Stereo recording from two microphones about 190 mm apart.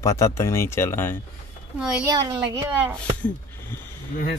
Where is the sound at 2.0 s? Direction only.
20° right (ahead or behind).